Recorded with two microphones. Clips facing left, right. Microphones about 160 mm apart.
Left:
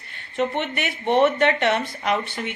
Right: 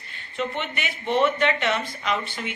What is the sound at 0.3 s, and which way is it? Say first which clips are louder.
Speech: left 5 dB; 60° left (ahead or behind).